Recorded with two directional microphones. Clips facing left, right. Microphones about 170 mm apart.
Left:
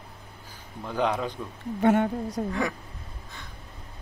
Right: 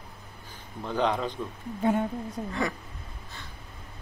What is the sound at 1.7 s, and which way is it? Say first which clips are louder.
Speech: left 4 dB; 75° left (ahead or behind).